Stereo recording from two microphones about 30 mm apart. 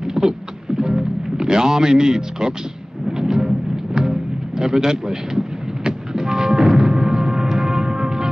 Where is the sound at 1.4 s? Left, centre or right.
Right.